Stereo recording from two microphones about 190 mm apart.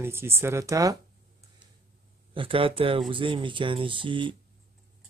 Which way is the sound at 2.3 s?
30° right (ahead or behind).